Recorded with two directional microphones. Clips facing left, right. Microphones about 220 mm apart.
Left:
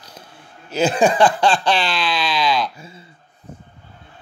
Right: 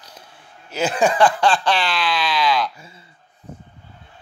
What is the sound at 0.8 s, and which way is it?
Speech, 30° left (ahead or behind).